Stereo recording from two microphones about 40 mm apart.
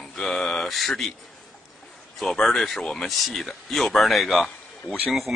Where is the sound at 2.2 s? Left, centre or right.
Centre.